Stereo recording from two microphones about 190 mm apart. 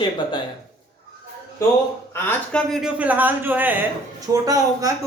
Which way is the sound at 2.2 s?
10° left (ahead or behind).